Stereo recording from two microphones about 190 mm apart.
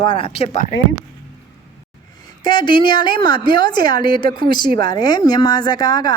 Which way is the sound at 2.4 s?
25° left (ahead or behind).